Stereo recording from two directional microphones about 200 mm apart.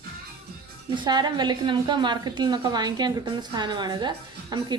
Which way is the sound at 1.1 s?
20° right (ahead or behind).